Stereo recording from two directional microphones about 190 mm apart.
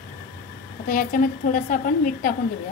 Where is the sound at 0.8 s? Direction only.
45° left (ahead or behind).